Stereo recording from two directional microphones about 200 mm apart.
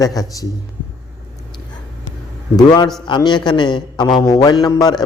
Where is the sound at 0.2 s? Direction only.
20° left (ahead or behind).